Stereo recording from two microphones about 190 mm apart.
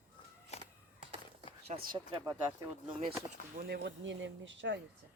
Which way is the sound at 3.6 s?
55° right (ahead or behind).